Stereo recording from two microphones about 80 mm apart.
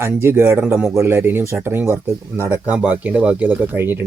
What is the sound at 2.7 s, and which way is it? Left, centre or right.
Speech, centre.